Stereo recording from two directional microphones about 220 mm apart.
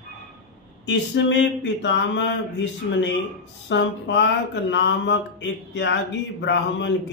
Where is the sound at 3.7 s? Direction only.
55° left (ahead or behind).